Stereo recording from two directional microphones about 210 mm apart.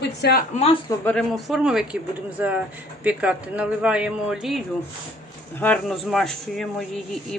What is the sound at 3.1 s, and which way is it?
Speech, 5° right (ahead or behind).